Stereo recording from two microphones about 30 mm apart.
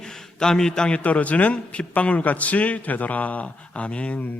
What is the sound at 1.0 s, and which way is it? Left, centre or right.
Speech, left.